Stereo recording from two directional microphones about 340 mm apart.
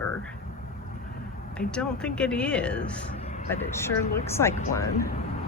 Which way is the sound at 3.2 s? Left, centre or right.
Centre.